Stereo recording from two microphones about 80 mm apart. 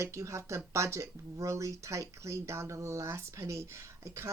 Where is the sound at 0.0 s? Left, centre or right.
Right.